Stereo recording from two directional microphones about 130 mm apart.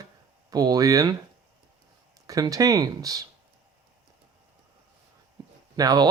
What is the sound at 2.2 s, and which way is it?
Speech, 25° right (ahead or behind).